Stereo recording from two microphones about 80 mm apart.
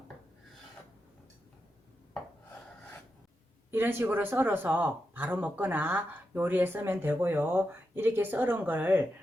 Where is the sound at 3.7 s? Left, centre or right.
Right.